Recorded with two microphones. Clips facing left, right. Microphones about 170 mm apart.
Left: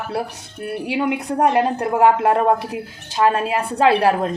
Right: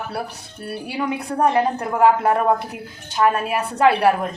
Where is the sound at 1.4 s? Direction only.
20° left (ahead or behind).